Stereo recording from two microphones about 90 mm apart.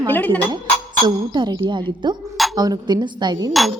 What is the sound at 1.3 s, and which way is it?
A woman's voice, 55° right (ahead or behind).